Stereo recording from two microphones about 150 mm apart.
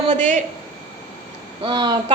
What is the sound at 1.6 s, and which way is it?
Speech, 30° right (ahead or behind).